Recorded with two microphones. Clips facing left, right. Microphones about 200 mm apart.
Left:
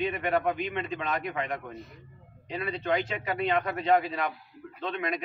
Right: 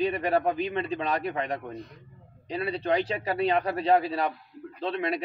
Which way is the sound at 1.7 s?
5° left (ahead or behind).